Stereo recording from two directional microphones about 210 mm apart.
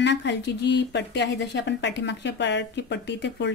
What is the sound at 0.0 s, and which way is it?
Speech, 55° left (ahead or behind).